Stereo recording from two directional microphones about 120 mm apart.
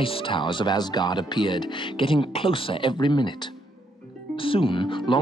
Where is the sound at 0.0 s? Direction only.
45° left (ahead or behind).